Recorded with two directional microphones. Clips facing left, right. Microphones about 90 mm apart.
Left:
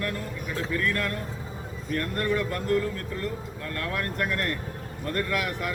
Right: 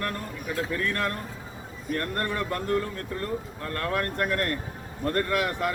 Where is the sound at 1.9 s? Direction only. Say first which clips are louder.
Left 2 dB; 40° right (ahead or behind).